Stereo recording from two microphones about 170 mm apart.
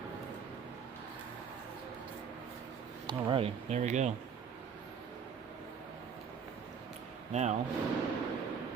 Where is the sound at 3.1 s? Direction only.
30° right (ahead or behind).